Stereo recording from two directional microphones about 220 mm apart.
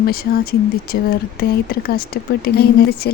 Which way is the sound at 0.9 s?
45° left (ahead or behind).